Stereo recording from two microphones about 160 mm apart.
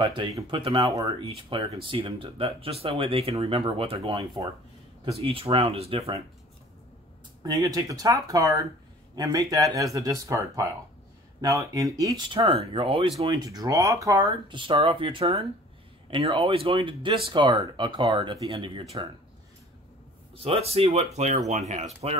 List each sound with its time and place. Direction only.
0.0 s speech: 30° right (ahead or behind)
7.4 s speech: 25° right (ahead or behind)
20.3 s speech: 40° right (ahead or behind)